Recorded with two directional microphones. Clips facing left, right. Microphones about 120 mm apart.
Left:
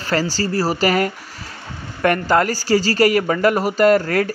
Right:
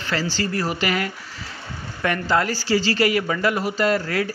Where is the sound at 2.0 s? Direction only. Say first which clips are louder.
Left 5 dB; 50° left (ahead or behind).